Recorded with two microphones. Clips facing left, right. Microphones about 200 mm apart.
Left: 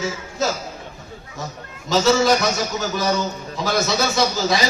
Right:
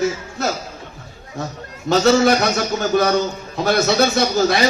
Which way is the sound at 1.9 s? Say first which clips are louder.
Right 3 dB; 60° right (ahead or behind).